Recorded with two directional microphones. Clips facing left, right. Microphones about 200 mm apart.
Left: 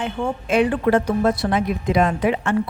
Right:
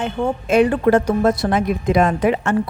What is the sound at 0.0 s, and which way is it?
A woman's voice, 40° right (ahead or behind).